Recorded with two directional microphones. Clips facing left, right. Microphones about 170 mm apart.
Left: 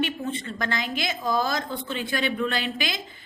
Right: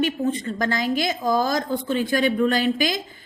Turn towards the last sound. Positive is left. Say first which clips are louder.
# right 7 dB
turn(degrees=-45)  # may be behind; listen again after turning